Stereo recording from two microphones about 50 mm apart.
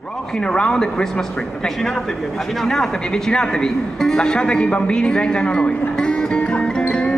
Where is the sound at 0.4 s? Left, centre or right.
Centre.